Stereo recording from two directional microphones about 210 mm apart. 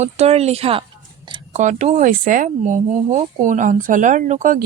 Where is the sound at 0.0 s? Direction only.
30° right (ahead or behind).